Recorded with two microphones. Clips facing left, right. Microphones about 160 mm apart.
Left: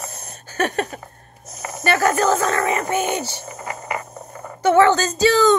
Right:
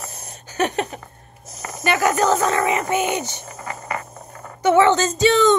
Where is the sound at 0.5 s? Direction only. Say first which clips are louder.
Even; 15° right (ahead or behind).